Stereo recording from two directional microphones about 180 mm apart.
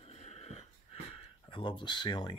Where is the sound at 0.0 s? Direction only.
35° left (ahead or behind).